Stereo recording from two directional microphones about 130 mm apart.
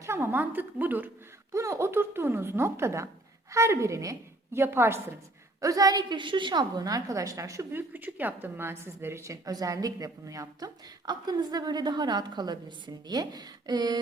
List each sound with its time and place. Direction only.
0.0 s a woman's voice: 20° right (ahead or behind)